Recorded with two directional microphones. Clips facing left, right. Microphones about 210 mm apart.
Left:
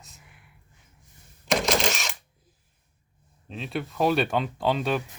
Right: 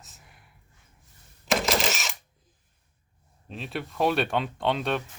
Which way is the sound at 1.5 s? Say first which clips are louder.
Left 1 dB; centre (ahead or behind).